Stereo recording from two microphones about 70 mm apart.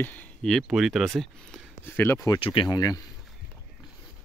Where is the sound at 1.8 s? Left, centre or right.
Left.